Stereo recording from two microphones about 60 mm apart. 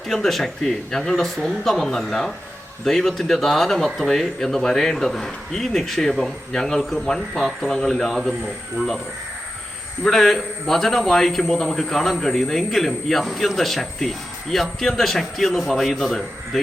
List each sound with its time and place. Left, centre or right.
0.1 s a man's voice: centre
10.0 s a man's voice: centre